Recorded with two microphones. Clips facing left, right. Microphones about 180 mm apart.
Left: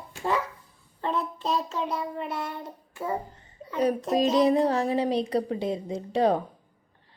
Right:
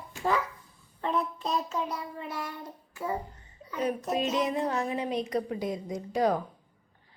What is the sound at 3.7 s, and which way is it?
A child's voice, 35° left (ahead or behind).